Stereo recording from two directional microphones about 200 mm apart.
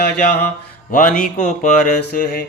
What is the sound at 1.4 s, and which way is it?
Mantra, 40° left (ahead or behind).